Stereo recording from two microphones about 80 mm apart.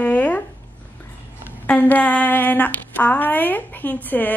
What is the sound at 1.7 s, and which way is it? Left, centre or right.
Speech, left.